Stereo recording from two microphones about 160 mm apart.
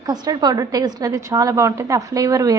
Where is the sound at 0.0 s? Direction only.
25° right (ahead or behind).